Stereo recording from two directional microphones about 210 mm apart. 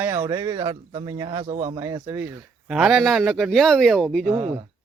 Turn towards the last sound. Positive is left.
turn(degrees=0)  # may be behind; listen again after turning